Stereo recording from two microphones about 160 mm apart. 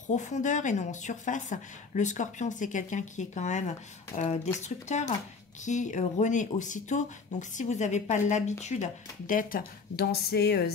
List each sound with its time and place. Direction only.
0.1 s a woman's voice: 50° left (ahead or behind); by 10.7 s 90° left